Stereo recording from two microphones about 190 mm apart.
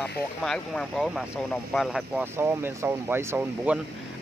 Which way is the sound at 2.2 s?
15° right (ahead or behind).